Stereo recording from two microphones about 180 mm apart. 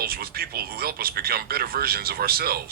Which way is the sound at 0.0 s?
55° right (ahead or behind).